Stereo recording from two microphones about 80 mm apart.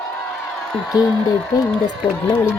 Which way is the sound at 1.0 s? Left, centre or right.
Left.